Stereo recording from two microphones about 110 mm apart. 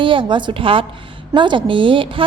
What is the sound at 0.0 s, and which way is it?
A woman's voice, 50° right (ahead or behind).